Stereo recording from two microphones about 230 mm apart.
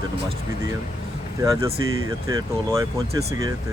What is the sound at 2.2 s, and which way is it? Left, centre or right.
Speech, centre.